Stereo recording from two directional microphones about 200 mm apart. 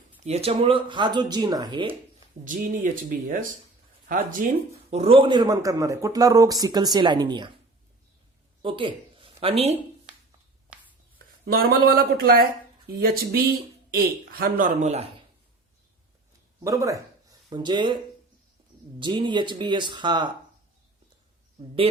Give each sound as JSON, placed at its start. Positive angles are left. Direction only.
{"t": 0.3, "sound": "speech", "side_deg": -30}
{"t": 2.4, "sound": "speech", "side_deg": -40}
{"t": 8.6, "sound": "speech", "side_deg": -25}
{"t": 11.4, "sound": "speech", "side_deg": -50}
{"t": 16.6, "sound": "speech", "side_deg": -15}